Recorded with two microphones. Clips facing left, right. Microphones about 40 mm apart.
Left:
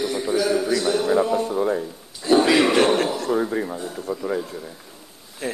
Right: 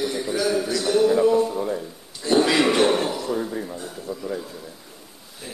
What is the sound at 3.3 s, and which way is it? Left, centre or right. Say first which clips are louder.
Speech: left 4 dB; left.